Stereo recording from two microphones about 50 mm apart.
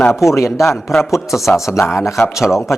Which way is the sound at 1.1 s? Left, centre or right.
Centre.